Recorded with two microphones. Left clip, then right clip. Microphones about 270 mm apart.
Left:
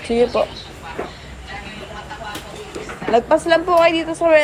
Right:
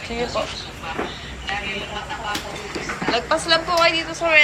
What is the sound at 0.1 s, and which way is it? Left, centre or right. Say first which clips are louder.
Speech: left 10 dB; centre.